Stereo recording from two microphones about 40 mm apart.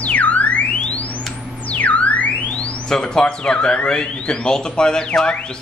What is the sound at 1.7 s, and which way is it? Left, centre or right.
Music, left.